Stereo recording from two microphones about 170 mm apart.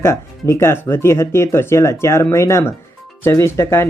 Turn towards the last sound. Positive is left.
turn(degrees=15)  # may be behind; listen again after turning